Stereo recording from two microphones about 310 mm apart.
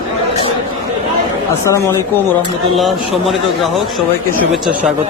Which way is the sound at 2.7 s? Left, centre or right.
Centre.